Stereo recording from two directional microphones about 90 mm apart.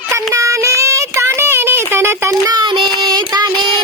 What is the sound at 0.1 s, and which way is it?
Child singing, 35° right (ahead or behind).